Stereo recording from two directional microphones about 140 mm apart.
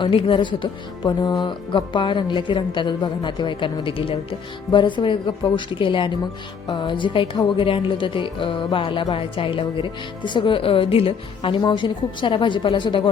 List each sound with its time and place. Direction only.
0.0 s speech: 40° left (ahead or behind)